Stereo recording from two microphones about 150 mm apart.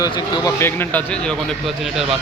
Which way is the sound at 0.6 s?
10° left (ahead or behind).